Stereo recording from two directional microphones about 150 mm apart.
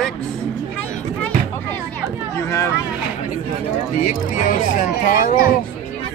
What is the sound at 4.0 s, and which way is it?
Speech, 65° left (ahead or behind).